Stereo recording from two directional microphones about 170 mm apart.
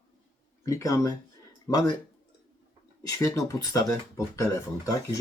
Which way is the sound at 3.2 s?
20° left (ahead or behind).